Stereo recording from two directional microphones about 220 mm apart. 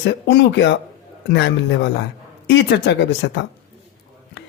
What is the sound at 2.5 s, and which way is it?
Speech, 55° left (ahead or behind).